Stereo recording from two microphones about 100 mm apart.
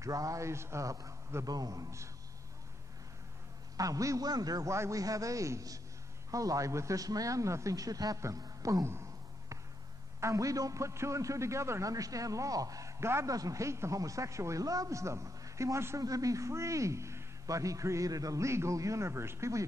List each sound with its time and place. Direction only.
0.0 s a man's voice: 35° right (ahead or behind)
3.7 s a man's voice: 35° right (ahead or behind)
8.8 s a sound: 30° right (ahead or behind)
10.2 s a man's voice: 35° right (ahead or behind)